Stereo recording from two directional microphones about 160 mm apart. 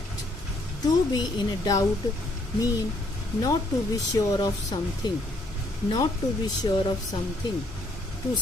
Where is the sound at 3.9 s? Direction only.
20° left (ahead or behind).